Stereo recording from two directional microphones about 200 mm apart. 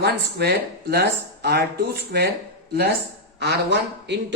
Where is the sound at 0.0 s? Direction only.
55° right (ahead or behind).